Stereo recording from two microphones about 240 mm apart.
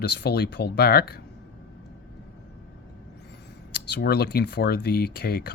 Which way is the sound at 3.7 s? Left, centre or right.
Left.